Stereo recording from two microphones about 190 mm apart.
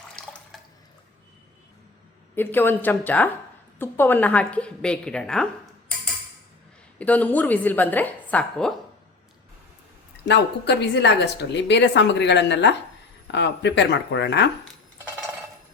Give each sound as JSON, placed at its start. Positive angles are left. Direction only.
{"t": 2.3, "sound": "a woman's voice", "side_deg": 10}
{"t": 7.0, "sound": "a woman's voice", "side_deg": 10}
{"t": 10.2, "sound": "a woman's voice", "side_deg": 65}